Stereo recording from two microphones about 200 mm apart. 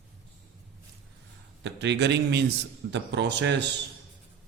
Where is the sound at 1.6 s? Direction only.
60° right (ahead or behind).